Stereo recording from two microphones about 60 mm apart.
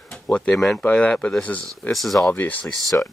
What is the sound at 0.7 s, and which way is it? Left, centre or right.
Speech, centre.